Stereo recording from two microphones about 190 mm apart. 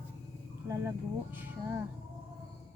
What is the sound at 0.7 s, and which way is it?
Speech, 10° right (ahead or behind).